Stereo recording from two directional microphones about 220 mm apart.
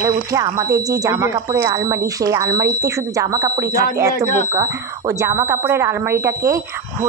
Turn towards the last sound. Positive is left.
turn(degrees=-10)  # may be behind; listen again after turning